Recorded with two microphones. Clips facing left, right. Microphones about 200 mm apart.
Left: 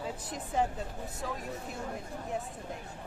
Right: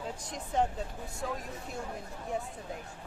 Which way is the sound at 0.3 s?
5° left (ahead or behind).